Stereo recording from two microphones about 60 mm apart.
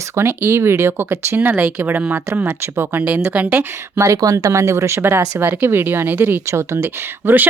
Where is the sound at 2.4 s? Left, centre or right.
Right.